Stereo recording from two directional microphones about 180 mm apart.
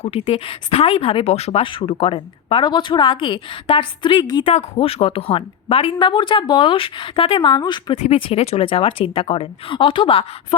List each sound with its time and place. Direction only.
0.0 s a woman's voice: 30° left (ahead or behind)